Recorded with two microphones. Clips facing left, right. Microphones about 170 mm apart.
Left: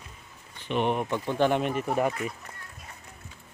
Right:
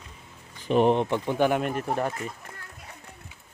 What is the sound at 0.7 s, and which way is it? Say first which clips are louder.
Speech: right 6 dB; 35° right (ahead or behind).